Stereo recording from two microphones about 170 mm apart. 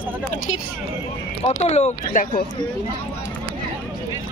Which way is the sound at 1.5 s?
40° left (ahead or behind).